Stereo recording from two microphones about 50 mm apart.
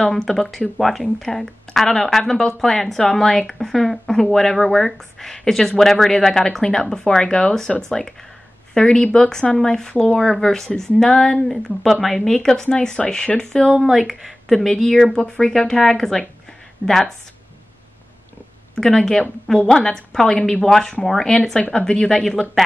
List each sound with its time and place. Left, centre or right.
0.0 s speech: centre
8.7 s speech: centre
12.6 s speech: centre
13.7 s speech: centre
18.8 s speech: centre